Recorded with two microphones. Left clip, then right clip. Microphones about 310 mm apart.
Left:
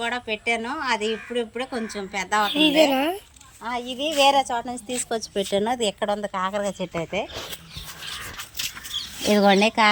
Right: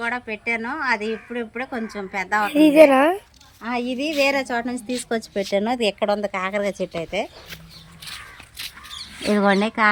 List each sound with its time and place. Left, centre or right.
0.0 s a woman's voice: centre
3.6 s speech: left
9.3 s a woman's voice: centre